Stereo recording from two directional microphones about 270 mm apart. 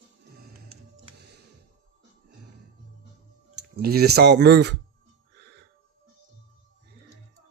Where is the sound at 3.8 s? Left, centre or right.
Right.